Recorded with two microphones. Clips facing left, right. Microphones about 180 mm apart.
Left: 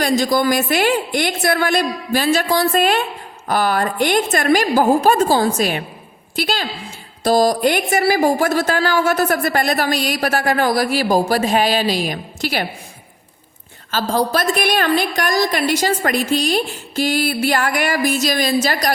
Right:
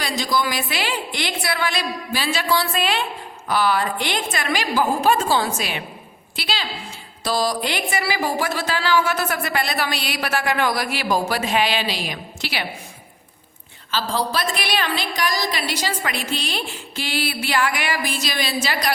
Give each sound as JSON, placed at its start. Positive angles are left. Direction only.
{"t": 0.0, "sound": "a woman's voice", "side_deg": 50}
{"t": 13.9, "sound": "a woman's voice", "side_deg": 50}